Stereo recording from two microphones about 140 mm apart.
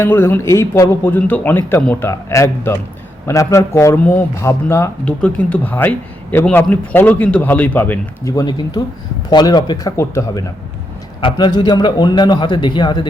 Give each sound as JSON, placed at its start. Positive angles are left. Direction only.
{"t": 0.0, "sound": "a man's voice", "side_deg": 15}
{"t": 8.2, "sound": "a man's voice", "side_deg": 30}
{"t": 11.2, "sound": "a man's voice", "side_deg": 35}